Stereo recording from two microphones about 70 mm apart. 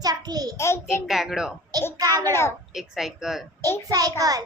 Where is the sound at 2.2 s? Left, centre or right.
Left.